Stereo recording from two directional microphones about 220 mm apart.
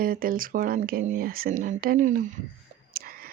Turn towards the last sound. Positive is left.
turn(degrees=-40)  # may be behind; listen again after turning